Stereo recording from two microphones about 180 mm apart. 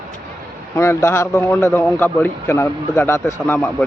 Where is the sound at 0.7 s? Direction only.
15° left (ahead or behind).